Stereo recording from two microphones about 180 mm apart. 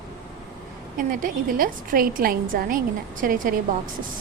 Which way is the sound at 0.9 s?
50° right (ahead or behind).